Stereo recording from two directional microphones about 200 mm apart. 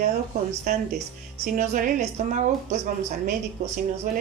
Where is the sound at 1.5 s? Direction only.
40° right (ahead or behind).